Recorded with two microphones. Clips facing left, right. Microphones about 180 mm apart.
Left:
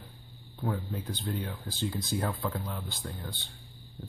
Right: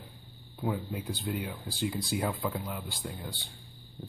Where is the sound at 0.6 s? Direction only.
10° right (ahead or behind).